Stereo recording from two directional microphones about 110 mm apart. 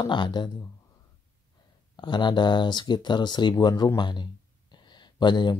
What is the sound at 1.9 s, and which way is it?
Speech, 45° left (ahead or behind).